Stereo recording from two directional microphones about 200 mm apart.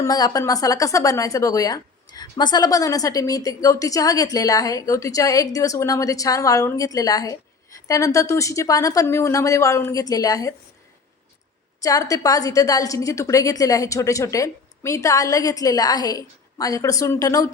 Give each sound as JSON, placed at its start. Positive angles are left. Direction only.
{"t": 0.0, "sound": "speech", "side_deg": 20}
{"t": 11.8, "sound": "speech", "side_deg": 15}